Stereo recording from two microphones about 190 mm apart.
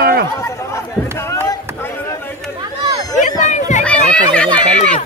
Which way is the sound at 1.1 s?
15° left (ahead or behind).